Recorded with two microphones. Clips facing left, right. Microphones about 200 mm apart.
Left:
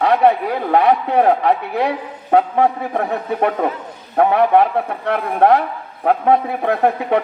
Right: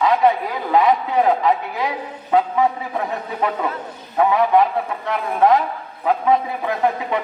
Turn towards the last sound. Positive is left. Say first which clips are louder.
# left 4 dB
turn(degrees=55)  # may be behind; listen again after turning